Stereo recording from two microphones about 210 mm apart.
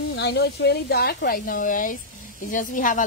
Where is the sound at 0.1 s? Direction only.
55° left (ahead or behind).